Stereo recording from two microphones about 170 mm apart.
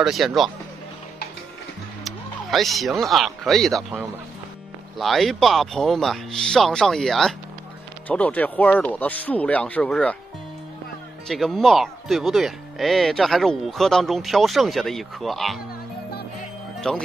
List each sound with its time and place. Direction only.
0.0 s speech: centre (ahead or behind)
2.0 s speech: centre (ahead or behind)
11.2 s speech: centre (ahead or behind)
16.8 s speech: 5° left (ahead or behind)